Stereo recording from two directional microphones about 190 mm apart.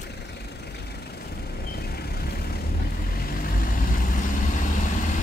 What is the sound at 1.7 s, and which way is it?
Vehicle, 55° left (ahead or behind).